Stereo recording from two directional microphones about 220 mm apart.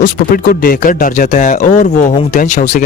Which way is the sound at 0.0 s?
40° left (ahead or behind).